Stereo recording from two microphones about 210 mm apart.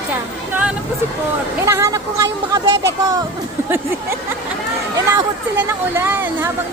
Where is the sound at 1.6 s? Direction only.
15° right (ahead or behind).